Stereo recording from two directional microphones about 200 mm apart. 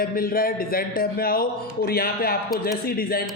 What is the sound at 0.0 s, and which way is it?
Speech, 45° left (ahead or behind).